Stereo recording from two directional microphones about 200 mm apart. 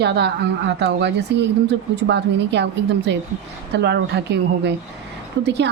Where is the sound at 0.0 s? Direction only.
55° right (ahead or behind).